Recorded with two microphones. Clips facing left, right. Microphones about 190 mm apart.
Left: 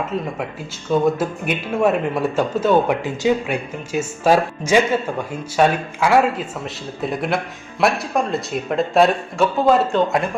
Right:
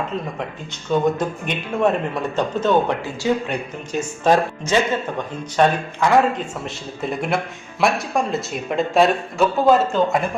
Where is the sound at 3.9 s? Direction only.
5° left (ahead or behind).